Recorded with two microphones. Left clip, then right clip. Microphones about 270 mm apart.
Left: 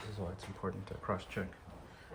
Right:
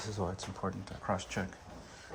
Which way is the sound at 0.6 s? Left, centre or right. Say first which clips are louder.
Right 1 dB; centre.